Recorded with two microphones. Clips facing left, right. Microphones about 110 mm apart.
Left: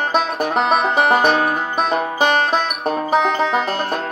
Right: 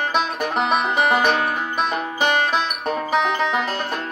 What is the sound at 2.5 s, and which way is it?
Music, 35° left (ahead or behind).